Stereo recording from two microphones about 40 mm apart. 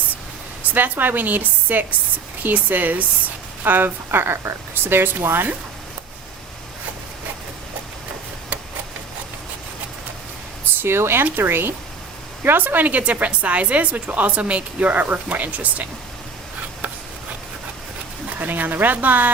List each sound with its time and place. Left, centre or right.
0.6 s a woman's voice: right
10.8 s speech: right
12.5 s a woman's voice: right
18.3 s a woman's voice: right